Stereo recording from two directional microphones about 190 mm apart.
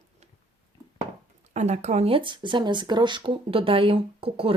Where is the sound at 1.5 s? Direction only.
35° right (ahead or behind).